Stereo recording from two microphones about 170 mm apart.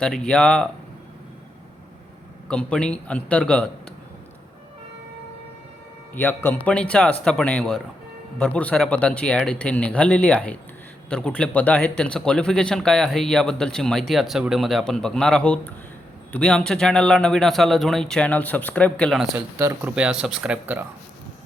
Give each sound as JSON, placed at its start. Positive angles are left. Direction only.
{"t": 0.0, "sound": "speech", "side_deg": 5}
{"t": 2.5, "sound": "speech", "side_deg": 5}
{"t": 6.1, "sound": "speech", "side_deg": 10}
{"t": 19.5, "sound": "speech", "side_deg": -20}
{"t": 20.0, "sound": "speech", "side_deg": -5}